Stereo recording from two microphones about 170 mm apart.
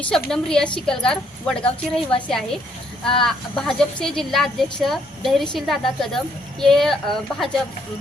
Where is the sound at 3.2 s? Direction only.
Centre (ahead or behind).